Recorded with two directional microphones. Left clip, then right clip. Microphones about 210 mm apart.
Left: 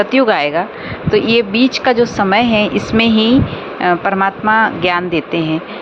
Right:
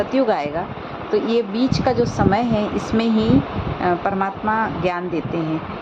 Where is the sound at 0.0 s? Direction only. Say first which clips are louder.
Left 7 dB; 15° left (ahead or behind).